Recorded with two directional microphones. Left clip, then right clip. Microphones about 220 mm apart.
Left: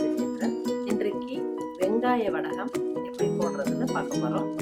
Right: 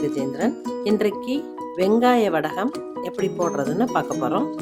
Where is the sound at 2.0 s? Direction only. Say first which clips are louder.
Right 8 dB; 50° right (ahead or behind).